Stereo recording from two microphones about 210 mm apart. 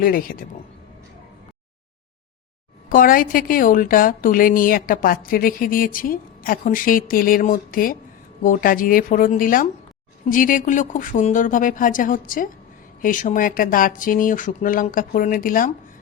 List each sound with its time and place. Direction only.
0.0 s speech: 45° left (ahead or behind)
2.9 s a woman's voice: 40° left (ahead or behind)